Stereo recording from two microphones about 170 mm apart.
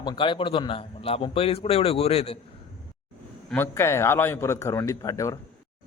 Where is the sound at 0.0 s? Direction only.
25° left (ahead or behind).